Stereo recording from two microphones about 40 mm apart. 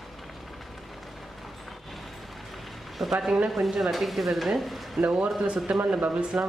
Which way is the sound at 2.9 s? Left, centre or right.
Centre.